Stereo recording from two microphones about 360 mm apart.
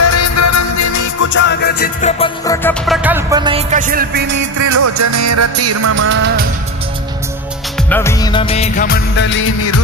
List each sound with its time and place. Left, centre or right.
0.0 s music: left
1.3 s music: left; by 4.4 s right
4.6 s music: right
7.9 s music of bollywood: centre; by 9.8 s left